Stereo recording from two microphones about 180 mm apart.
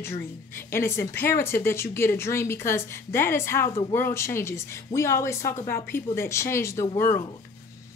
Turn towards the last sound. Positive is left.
turn(degrees=15)  # may be behind; listen again after turning